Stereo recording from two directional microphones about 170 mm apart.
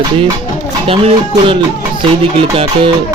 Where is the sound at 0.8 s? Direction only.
35° right (ahead or behind).